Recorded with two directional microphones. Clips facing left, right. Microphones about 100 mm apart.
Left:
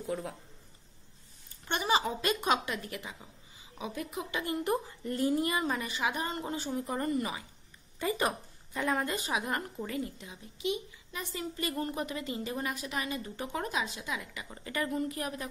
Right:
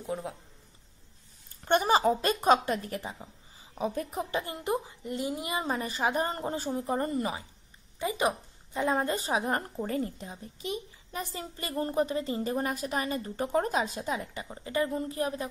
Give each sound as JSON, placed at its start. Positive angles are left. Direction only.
{"t": 0.0, "sound": "a man's voice", "side_deg": -20}
{"t": 1.6, "sound": "a woman's voice", "side_deg": -45}
{"t": 4.5, "sound": "speech", "side_deg": -20}
{"t": 5.6, "sound": "a woman's voice", "side_deg": -35}
{"t": 8.0, "sound": "a woman's voice", "side_deg": -20}